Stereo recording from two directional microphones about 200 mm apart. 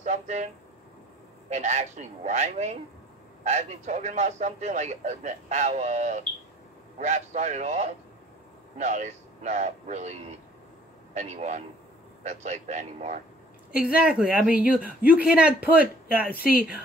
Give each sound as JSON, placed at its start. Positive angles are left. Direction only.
{"t": 0.0, "sound": "a sound", "side_deg": -35}
{"t": 1.5, "sound": "a man's voice", "side_deg": -35}
{"t": 11.1, "sound": "a man's voice", "side_deg": -35}
{"t": 13.7, "sound": "a woman's voice", "side_deg": -5}